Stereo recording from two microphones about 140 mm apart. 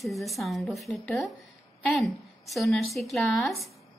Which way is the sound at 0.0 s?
Centre (ahead or behind).